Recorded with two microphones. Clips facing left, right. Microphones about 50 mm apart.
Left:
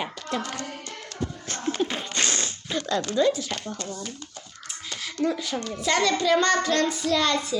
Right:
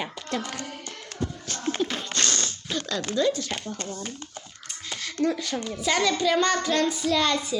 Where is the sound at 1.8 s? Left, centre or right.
Centre.